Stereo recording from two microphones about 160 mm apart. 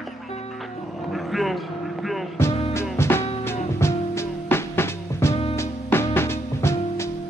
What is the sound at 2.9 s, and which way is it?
Music, 15° left (ahead or behind).